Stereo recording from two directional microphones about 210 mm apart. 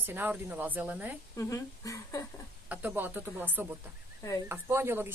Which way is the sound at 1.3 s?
15° left (ahead or behind).